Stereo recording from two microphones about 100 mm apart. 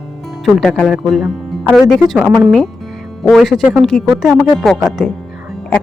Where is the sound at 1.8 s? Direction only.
Centre (ahead or behind).